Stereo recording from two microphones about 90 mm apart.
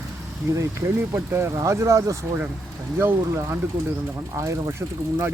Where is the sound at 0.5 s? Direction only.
30° right (ahead or behind).